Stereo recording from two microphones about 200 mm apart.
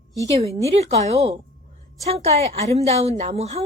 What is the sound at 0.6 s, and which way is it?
A woman's voice, 30° right (ahead or behind).